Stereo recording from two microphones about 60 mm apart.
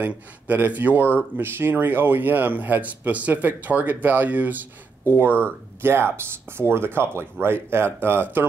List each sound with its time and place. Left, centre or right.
0.0 s speech: right
5.4 s speech: right